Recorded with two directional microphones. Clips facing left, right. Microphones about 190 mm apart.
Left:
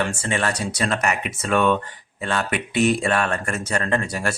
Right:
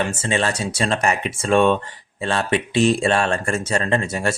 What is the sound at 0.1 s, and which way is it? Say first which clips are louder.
Speech: right 2 dB; 25° right (ahead or behind).